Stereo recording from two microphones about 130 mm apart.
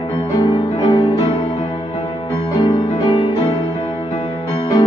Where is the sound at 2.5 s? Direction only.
35° left (ahead or behind).